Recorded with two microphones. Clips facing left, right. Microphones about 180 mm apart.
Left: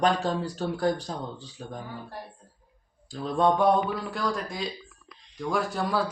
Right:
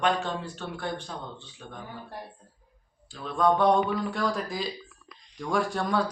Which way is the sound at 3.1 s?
35° left (ahead or behind).